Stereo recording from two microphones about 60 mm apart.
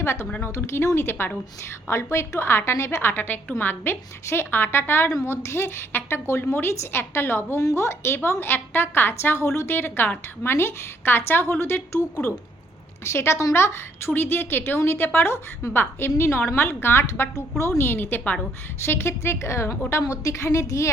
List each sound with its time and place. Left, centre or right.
0.0 s a woman's voice: left
7.6 s a woman's voice: left
13.1 s a woman's voice: left